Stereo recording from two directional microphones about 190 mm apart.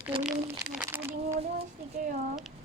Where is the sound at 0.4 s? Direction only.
15° right (ahead or behind).